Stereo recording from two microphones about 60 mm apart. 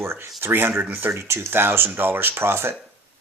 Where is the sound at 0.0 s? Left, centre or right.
Right.